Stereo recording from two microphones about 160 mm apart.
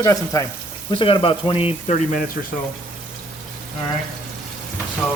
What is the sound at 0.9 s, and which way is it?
Speech, 35° left (ahead or behind).